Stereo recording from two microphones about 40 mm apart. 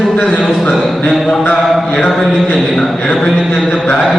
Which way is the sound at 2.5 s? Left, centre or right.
Centre.